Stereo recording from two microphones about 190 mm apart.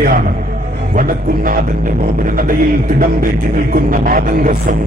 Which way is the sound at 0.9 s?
50° right (ahead or behind).